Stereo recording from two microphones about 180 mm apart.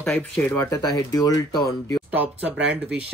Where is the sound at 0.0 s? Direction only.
5° left (ahead or behind).